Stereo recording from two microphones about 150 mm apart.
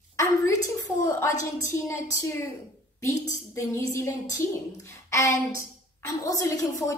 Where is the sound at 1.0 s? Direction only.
20° left (ahead or behind).